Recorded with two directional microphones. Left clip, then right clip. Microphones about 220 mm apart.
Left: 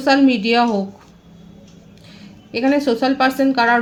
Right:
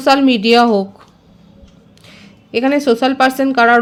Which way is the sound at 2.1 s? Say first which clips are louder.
Right 5 dB; 50° right (ahead or behind).